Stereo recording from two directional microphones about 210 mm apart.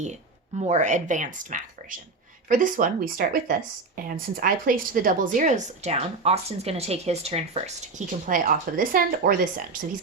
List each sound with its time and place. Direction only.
0.0 s a woman's voice: 35° right (ahead or behind)